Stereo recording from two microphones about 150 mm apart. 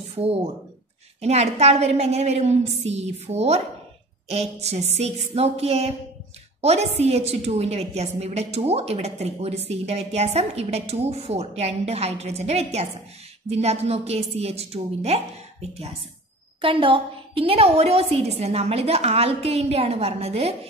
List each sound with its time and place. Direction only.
0.1 s a woman's voice: 40° right (ahead or behind)
16.6 s a woman's voice: 35° right (ahead or behind)